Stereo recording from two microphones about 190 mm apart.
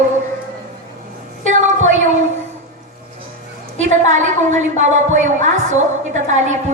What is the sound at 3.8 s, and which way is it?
A woman's voice, 40° right (ahead or behind).